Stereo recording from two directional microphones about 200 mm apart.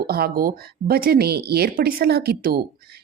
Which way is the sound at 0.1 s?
50° right (ahead or behind).